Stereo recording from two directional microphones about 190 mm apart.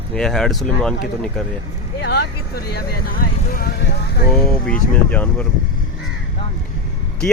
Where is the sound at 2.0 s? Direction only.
55° left (ahead or behind).